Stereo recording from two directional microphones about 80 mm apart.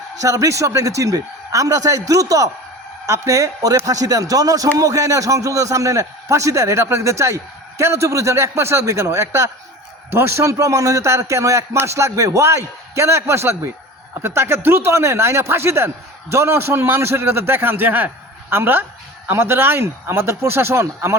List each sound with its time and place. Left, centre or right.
0.2 s a man's voice: right